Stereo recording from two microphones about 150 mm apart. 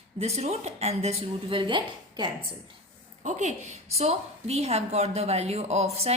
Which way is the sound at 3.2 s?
55° right (ahead or behind).